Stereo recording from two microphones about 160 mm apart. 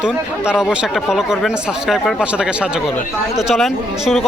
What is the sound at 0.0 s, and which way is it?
Speech, 5° right (ahead or behind).